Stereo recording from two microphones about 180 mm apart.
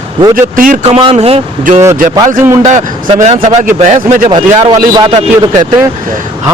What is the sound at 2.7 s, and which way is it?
Speech, 40° right (ahead or behind).